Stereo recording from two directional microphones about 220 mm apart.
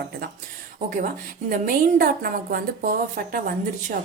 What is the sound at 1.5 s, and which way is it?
A woman's voice, 40° right (ahead or behind).